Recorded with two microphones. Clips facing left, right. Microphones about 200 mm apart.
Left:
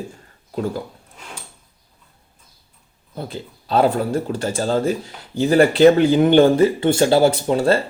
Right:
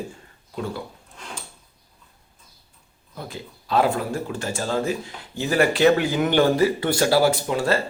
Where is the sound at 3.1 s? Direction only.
30° left (ahead or behind).